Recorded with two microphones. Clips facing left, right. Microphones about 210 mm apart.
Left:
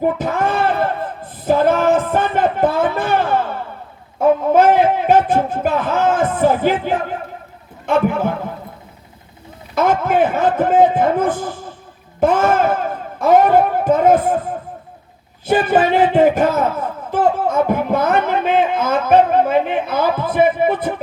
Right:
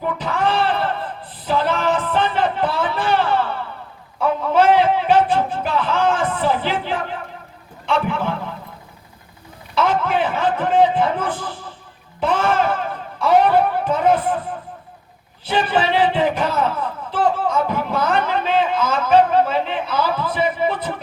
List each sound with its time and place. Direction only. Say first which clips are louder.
0.0 s a sound: left 4 dB; 45° left (ahead or behind)
4.2 s music: left 5 dB; 45° left (ahead or behind)
7.9 s a man's voice: left 5 dB; 45° left (ahead or behind)
9.7 s a man's voice: left 4 dB; 45° left (ahead or behind)
15.4 s a man's voice: left 5 dB; 45° left (ahead or behind)